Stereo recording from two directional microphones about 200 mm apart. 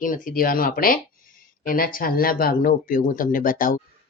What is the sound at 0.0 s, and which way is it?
Speech, 45° left (ahead or behind).